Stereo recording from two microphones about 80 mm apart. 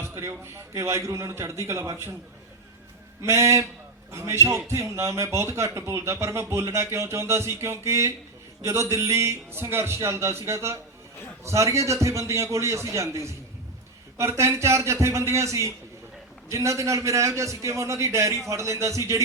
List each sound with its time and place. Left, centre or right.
0.0 s speech: right
3.2 s speech: right